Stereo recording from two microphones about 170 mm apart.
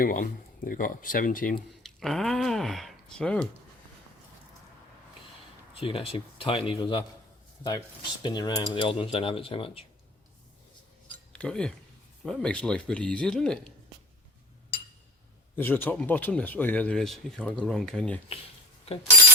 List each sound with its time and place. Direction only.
0.0 s speech: 55° left (ahead or behind)
1.8 s speech: centre (ahead or behind)
5.8 s speech: 30° left (ahead or behind)
8.2 s speech: 25° left (ahead or behind)
11.3 s a man's voice: 5° left (ahead or behind)
15.5 s speech: 10° left (ahead or behind)